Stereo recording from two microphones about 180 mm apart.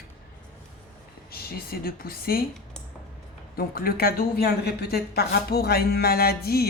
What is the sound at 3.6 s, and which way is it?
A woman's voice, 55° left (ahead or behind).